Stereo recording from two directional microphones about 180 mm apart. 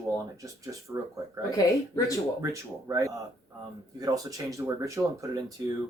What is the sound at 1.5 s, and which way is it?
Speech, 20° left (ahead or behind).